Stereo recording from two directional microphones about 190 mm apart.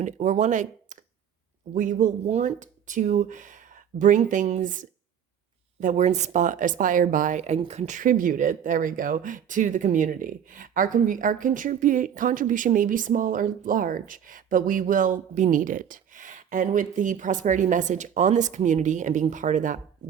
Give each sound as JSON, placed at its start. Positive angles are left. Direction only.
{"t": 0.0, "sound": "speech", "side_deg": -40}